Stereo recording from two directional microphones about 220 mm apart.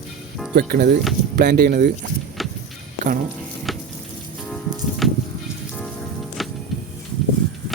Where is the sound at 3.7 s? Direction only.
Centre (ahead or behind).